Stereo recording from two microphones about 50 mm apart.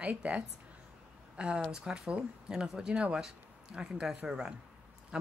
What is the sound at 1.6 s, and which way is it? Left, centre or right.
A woman's voice, centre.